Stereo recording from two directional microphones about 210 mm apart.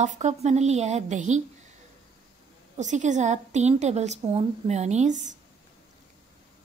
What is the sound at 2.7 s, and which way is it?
A woman's voice, 35° right (ahead or behind).